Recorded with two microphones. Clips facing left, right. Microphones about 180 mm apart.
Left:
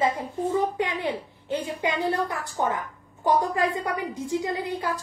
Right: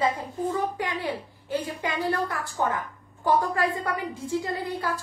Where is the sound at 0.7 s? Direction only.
20° left (ahead or behind).